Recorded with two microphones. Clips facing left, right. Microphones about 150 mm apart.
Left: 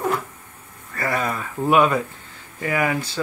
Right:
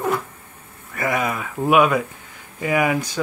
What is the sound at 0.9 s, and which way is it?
Speech, 15° right (ahead or behind).